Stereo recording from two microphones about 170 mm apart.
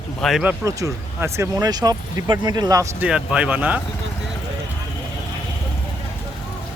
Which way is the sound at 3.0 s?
5° right (ahead or behind).